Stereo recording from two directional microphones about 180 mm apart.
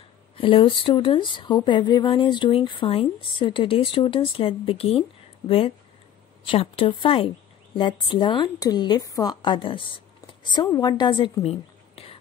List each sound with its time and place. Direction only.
0.4 s speech: 30° left (ahead or behind)
6.4 s speech: 30° left (ahead or behind)